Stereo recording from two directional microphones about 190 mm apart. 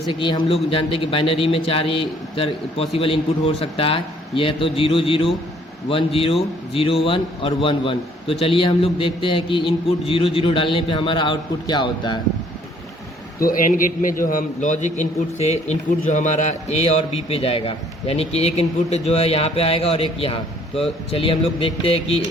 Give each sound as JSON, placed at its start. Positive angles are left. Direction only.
{"t": 0.1, "sound": "a man's voice", "side_deg": 25}
{"t": 13.4, "sound": "a man's voice", "side_deg": 45}